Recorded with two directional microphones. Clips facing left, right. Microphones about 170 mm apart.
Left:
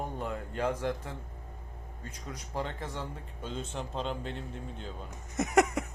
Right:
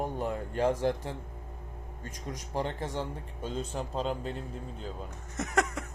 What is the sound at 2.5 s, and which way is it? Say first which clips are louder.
Speech: right 4 dB; 20° right (ahead or behind).